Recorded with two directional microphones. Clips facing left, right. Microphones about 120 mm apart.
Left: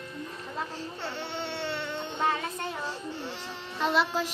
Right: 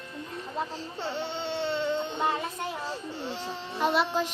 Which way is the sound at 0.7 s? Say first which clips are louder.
Right 3 dB; 20° right (ahead or behind).